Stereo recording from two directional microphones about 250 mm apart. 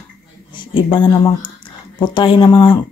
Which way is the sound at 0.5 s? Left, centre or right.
Centre.